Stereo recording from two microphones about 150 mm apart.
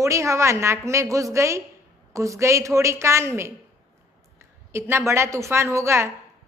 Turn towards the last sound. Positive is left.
turn(degrees=-20)  # may be behind; listen again after turning